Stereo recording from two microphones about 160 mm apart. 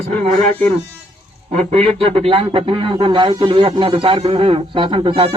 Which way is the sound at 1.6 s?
35° right (ahead or behind).